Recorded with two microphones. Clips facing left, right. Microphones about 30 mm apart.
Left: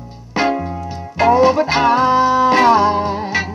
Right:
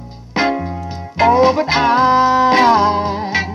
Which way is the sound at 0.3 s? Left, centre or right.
Right.